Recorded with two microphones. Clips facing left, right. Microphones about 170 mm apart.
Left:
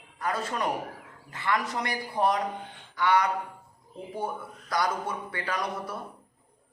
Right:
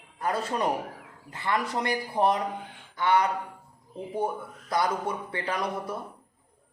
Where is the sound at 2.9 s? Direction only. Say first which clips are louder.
Right 1 dB; 25° right (ahead or behind).